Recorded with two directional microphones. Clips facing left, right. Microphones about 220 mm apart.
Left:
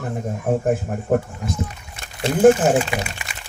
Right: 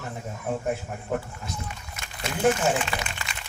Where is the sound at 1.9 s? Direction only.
30° left (ahead or behind).